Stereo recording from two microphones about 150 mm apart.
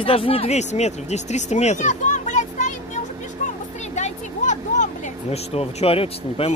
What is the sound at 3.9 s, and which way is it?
Vehicle, 50° left (ahead or behind).